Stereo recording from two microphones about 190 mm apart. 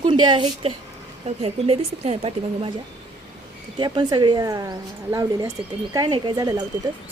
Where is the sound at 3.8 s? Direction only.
25° right (ahead or behind).